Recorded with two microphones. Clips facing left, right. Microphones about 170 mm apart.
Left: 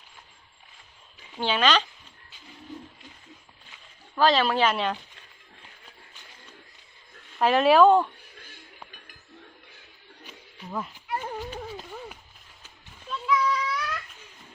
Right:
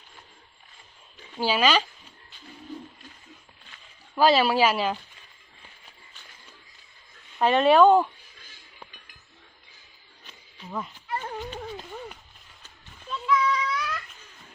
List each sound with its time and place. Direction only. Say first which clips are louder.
1.4 s speech: right 1 dB; 5° right (ahead or behind)
4.1 s speech: right 2 dB; 10° right (ahead or behind)
7.3 s speech: even; centre (ahead or behind)
8.4 s music: left 2 dB; 55° left (ahead or behind)
10.2 s a sound: left 1 dB; 5° left (ahead or behind)